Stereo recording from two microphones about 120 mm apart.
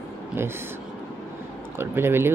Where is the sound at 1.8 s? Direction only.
20° right (ahead or behind).